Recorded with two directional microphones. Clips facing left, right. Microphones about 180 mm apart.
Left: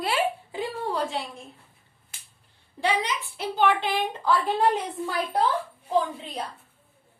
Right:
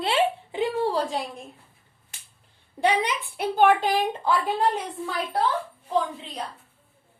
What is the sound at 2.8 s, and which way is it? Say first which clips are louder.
A woman's voice: right 3 dB; 55° right (ahead or behind).